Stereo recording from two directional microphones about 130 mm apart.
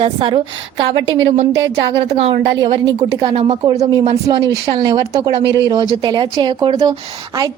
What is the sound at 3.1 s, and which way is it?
A woman's voice, 30° right (ahead or behind).